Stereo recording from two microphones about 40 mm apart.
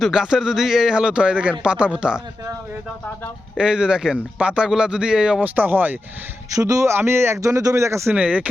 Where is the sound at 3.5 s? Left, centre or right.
Right.